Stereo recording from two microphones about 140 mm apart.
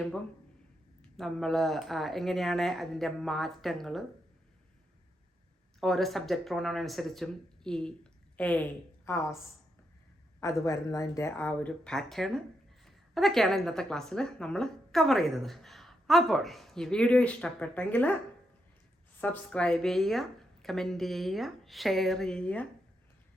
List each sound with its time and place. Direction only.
1.1 s a woman's voice: 5° left (ahead or behind)
5.8 s a woman's voice: centre (ahead or behind); by 9.4 s 20° left (ahead or behind)
10.6 s a woman's voice: 25° left (ahead or behind)
19.2 s a woman's voice: 10° left (ahead or behind)